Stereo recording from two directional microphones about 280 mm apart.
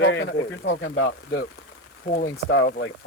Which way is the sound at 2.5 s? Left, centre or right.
Left.